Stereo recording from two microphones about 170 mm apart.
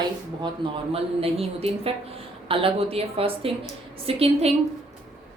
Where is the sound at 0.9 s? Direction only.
35° right (ahead or behind).